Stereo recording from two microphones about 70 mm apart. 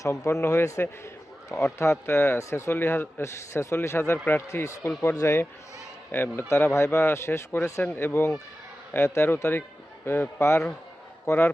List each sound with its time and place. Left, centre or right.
0.0 s a man's voice: left
6.1 s a man's voice: left